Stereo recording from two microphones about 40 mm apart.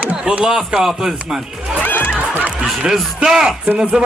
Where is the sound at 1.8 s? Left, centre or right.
Left.